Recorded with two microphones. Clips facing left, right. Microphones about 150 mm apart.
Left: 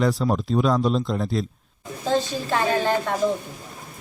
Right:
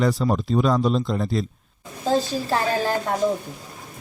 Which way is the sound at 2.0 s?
35° right (ahead or behind).